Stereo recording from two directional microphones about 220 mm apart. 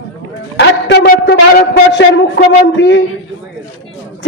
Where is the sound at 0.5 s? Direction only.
50° left (ahead or behind).